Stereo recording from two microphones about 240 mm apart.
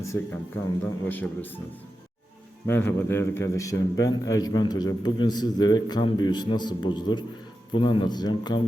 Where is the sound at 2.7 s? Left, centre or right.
Centre.